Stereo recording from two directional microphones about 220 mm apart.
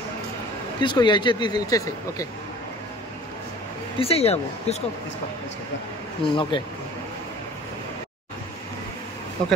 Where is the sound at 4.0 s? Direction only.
25° left (ahead or behind).